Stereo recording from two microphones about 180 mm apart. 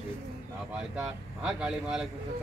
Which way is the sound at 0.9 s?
5° right (ahead or behind).